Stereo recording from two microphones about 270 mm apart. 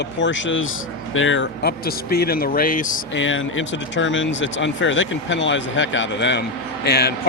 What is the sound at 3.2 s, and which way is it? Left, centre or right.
Speech, left.